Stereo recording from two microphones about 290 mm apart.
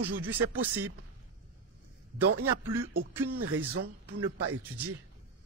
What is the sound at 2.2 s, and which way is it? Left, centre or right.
Speech, right.